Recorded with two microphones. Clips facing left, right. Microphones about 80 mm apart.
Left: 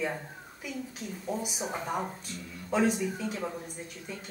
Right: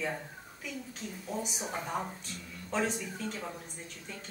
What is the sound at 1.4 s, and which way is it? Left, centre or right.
Speech, centre.